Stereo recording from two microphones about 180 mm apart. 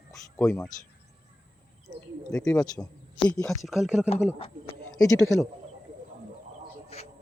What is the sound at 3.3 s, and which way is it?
Speech, centre (ahead or behind).